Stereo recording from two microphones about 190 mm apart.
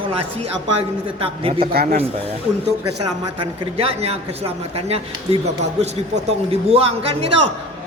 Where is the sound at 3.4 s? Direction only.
30° right (ahead or behind).